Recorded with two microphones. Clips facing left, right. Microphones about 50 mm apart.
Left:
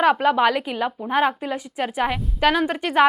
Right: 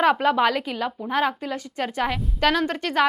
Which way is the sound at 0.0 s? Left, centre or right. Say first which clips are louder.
Left 2 dB; centre.